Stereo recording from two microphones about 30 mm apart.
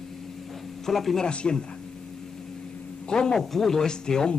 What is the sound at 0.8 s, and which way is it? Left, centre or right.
Speech, centre.